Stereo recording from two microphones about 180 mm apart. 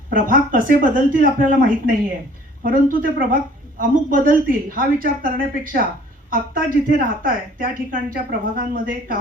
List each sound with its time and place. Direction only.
0.1 s a woman's voice: 50° right (ahead or behind)